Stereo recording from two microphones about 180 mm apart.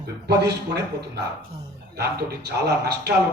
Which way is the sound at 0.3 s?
70° right (ahead or behind).